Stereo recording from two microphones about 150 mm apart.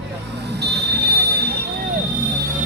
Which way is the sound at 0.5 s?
90° right.